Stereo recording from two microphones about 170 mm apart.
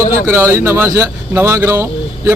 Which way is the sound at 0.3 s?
15° right (ahead or behind).